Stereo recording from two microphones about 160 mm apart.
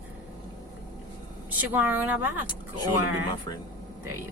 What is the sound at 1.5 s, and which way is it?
A woman's voice, 10° right (ahead or behind).